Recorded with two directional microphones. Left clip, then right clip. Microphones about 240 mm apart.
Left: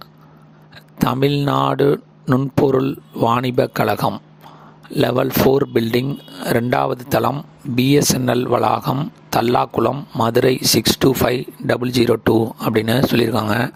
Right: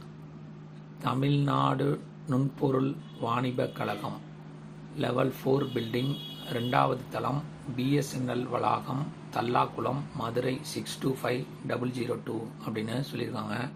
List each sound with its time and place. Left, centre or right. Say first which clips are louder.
0.9 s speech: left 12 dB; left